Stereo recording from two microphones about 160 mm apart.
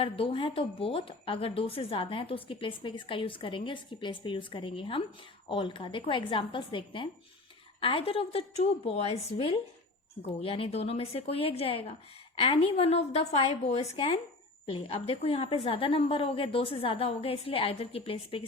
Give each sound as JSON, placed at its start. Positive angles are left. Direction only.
{"t": 0.0, "sound": "speech", "side_deg": 35}